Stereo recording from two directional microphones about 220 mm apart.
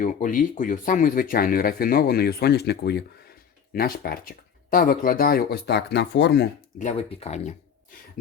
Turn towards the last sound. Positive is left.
turn(degrees=30)  # may be behind; listen again after turning